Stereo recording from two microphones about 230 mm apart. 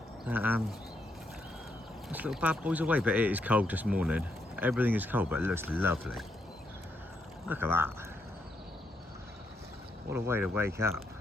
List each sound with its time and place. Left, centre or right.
0.3 s speech: centre
2.0 s speech: centre
7.4 s speech: centre
10.1 s speech: centre